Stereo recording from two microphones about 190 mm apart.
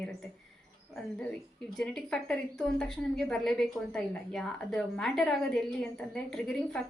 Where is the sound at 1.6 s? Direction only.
5° left (ahead or behind).